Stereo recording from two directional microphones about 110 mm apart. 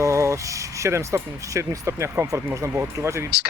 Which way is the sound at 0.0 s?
25° right (ahead or behind).